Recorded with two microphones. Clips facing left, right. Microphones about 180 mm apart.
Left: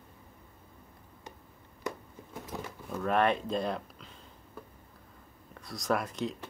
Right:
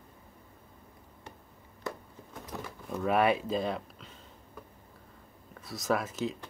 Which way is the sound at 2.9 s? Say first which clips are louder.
Right 1 dB; 10° right (ahead or behind).